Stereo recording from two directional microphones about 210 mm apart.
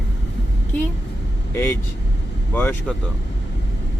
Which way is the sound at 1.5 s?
10° left (ahead or behind).